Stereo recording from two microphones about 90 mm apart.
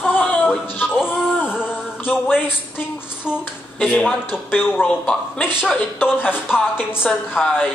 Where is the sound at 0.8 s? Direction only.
10° right (ahead or behind).